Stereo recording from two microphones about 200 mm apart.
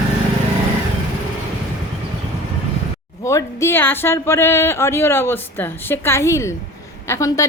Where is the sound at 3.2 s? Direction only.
15° left (ahead or behind).